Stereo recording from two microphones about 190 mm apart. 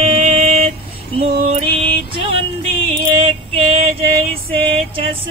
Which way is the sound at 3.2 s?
30° right (ahead or behind).